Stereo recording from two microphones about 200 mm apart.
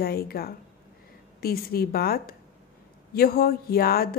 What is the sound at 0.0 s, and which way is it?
A woman's voice, 50° left (ahead or behind).